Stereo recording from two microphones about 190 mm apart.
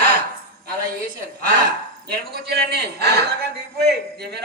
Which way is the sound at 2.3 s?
60° right (ahead or behind).